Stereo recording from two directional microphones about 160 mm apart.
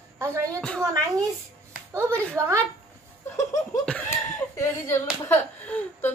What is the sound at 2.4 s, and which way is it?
Speech, 20° right (ahead or behind).